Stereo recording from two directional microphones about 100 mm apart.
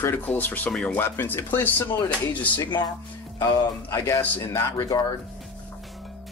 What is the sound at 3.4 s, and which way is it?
Speech, 30° left (ahead or behind).